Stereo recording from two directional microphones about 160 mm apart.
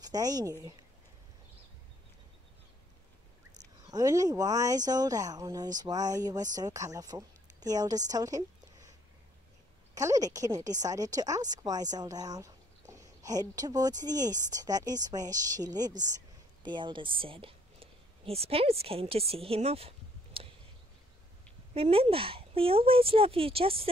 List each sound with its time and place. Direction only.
0.0 s a woman's voice: 25° right (ahead or behind)
3.9 s a woman's voice: 20° right (ahead or behind)
9.9 s a woman's voice: 20° right (ahead or behind); by 19.9 s 40° right (ahead or behind)
20.4 s a sound: 35° right (ahead or behind)
21.7 s speech: 35° right (ahead or behind)